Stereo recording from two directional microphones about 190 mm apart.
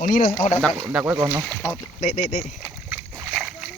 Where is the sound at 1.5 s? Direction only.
5° left (ahead or behind).